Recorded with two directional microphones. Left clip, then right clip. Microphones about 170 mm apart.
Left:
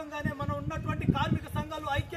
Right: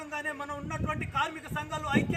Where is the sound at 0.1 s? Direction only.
Centre (ahead or behind).